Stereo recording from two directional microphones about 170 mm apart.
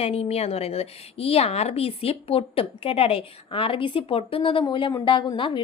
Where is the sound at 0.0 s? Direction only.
35° left (ahead or behind).